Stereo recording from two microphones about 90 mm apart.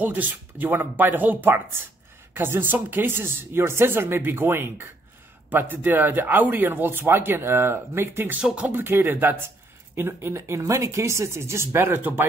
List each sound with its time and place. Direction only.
0.0 s speech: 20° right (ahead or behind)
8.4 s speech: 10° right (ahead or behind)
8.7 s speech: 25° right (ahead or behind)